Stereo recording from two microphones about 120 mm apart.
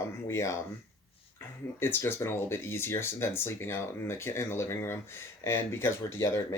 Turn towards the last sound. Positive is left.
turn(degrees=20)  # may be behind; listen again after turning